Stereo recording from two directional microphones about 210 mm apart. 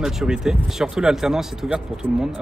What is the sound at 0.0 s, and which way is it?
Speech, centre (ahead or behind).